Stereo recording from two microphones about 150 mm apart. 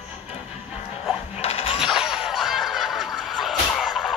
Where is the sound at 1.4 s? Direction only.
45° left (ahead or behind).